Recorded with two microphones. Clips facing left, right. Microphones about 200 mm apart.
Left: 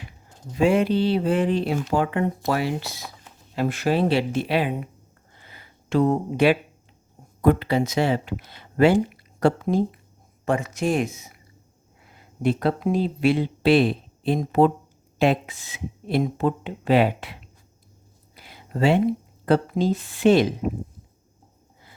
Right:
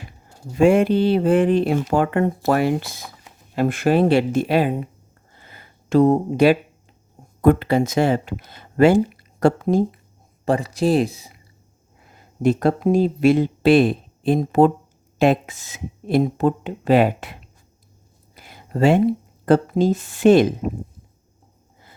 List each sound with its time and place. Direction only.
0.5 s speech: 50° right (ahead or behind)
5.4 s a sound: 45° right (ahead or behind)
7.4 s speech: 50° right (ahead or behind)
10.4 s speech: 35° right (ahead or behind)
12.1 s speech: 45° right (ahead or behind)
18.3 s a sound: 45° right (ahead or behind)
19.5 s speech: 45° right (ahead or behind)